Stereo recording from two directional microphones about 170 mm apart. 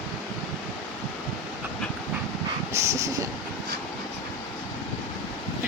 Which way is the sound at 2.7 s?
20° right (ahead or behind).